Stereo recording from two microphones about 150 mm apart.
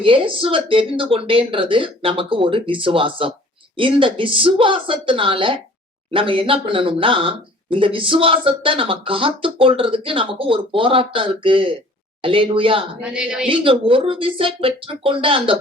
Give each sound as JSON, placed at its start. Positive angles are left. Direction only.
{"t": 0.0, "sound": "speech", "side_deg": -35}
{"t": 13.0, "sound": "speech", "side_deg": -5}
{"t": 13.5, "sound": "speech", "side_deg": -35}